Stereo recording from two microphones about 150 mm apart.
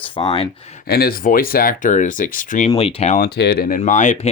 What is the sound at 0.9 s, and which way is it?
Speech, 90° left.